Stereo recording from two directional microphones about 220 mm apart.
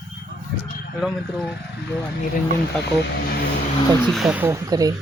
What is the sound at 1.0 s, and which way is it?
Speech, 5° right (ahead or behind).